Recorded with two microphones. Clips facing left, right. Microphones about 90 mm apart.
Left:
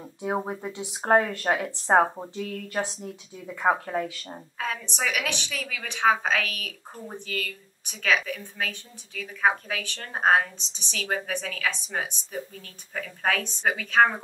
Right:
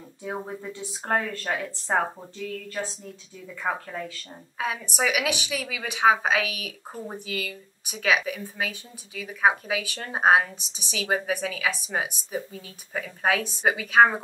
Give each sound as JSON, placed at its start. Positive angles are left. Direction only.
{"t": 0.3, "sound": "a woman's voice", "side_deg": 30}
{"t": 3.4, "sound": "a woman's voice", "side_deg": 30}
{"t": 4.6, "sound": "a woman's voice", "side_deg": -10}